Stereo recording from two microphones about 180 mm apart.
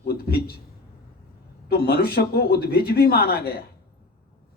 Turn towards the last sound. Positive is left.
turn(degrees=60)  # may be behind; listen again after turning